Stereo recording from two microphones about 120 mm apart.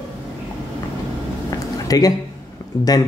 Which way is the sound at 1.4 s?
30° left (ahead or behind).